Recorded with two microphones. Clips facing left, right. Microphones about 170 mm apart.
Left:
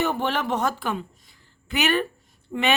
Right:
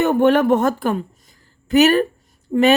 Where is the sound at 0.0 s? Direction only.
55° right (ahead or behind).